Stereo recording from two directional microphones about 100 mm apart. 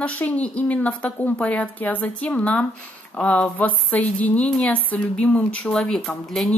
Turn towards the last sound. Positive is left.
turn(degrees=5)  # may be behind; listen again after turning